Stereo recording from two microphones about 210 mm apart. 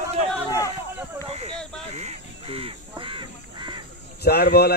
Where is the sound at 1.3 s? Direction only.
30° right (ahead or behind).